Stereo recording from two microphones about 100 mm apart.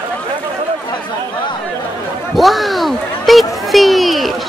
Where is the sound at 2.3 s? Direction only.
Centre (ahead or behind).